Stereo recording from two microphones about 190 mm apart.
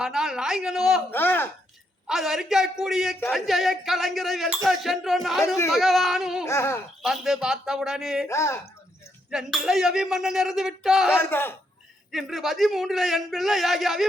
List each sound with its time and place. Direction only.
0.0 s speech: centre (ahead or behind)
1.1 s speech: 10° left (ahead or behind)
2.0 s speech: centre (ahead or behind)
6.4 s speech: 15° left (ahead or behind)
7.0 s speech: centre (ahead or behind)
8.3 s speech: 15° left (ahead or behind)
9.3 s speech: centre (ahead or behind)
11.2 s speech: 10° left (ahead or behind)
12.1 s speech: centre (ahead or behind)